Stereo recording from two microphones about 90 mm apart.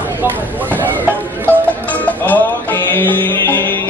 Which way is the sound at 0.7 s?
20° left (ahead or behind).